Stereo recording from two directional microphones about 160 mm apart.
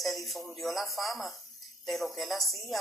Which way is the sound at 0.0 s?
Centre (ahead or behind).